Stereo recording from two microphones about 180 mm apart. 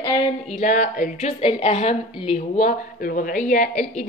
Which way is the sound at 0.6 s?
50° left (ahead or behind).